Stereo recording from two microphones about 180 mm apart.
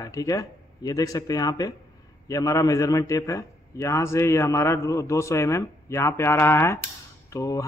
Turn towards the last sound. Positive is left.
turn(degrees=20)  # may be behind; listen again after turning